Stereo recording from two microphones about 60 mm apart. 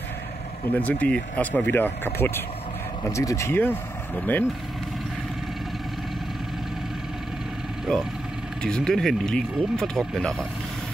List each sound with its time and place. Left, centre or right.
0.7 s speech: left
3.1 s speech: left
3.5 s speech: left
8.6 s speech: centre